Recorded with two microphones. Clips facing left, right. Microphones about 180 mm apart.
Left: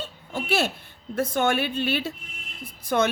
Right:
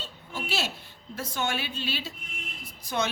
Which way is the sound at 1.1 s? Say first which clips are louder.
Left 8 dB; 55° left (ahead or behind).